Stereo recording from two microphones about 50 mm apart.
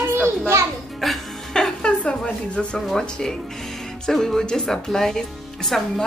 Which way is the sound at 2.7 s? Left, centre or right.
Centre.